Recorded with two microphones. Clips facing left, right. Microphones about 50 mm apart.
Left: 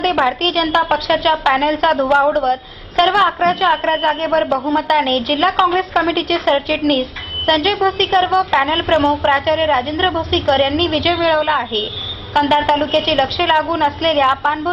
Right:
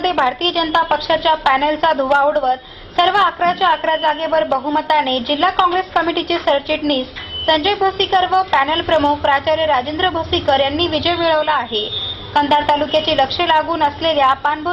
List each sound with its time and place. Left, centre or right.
0.2 s a woman's voice: centre
0.8 s a woman's voice: centre